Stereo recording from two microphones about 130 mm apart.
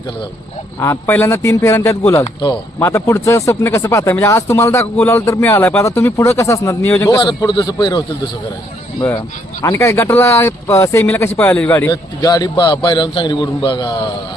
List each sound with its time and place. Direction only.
0.8 s speech: 20° left (ahead or behind)
7.2 s a man's voice: 35° left (ahead or behind)
9.0 s speech: 25° left (ahead or behind)
11.9 s a man's voice: 30° left (ahead or behind)